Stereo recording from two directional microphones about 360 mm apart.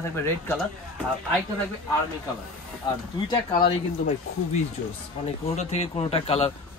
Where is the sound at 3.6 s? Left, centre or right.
Centre.